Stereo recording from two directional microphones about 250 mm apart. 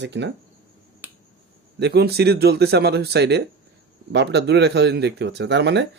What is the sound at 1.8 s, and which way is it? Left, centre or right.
Speech, right.